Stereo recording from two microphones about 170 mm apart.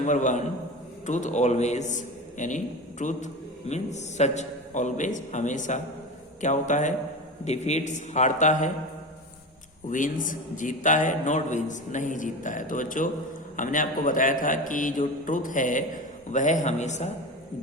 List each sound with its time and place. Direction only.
0.0 s a man's voice: 45° left (ahead or behind)
9.9 s a man's voice: 50° left (ahead or behind)